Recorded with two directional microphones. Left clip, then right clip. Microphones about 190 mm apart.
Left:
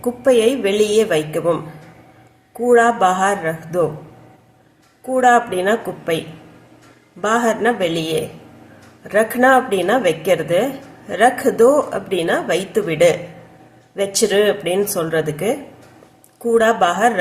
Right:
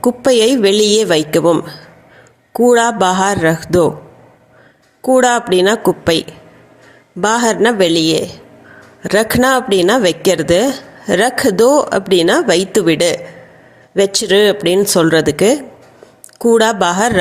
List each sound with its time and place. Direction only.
0.0 s a woman's voice: 45° right (ahead or behind)
5.0 s a woman's voice: 50° right (ahead or behind)